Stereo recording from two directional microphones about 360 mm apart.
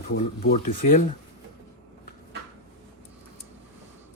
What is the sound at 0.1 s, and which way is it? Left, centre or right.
Speech, left.